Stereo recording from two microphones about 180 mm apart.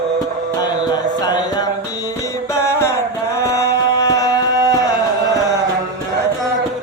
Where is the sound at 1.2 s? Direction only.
20° left (ahead or behind).